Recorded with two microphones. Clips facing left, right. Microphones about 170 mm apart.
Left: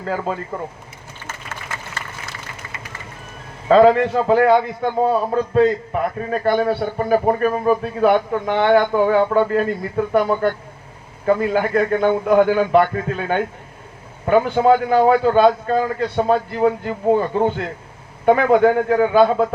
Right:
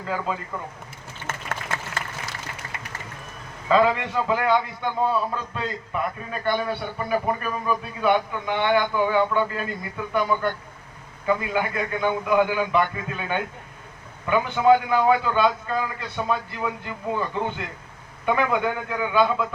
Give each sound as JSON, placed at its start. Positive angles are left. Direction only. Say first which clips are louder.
{"t": 0.0, "sound": "a man's voice", "louder": "left 4 dB", "side_deg": 45}
{"t": 3.7, "sound": "a man's voice", "louder": "left 8 dB", "side_deg": 40}